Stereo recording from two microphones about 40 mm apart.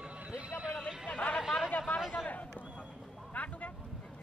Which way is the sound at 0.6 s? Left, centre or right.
Centre.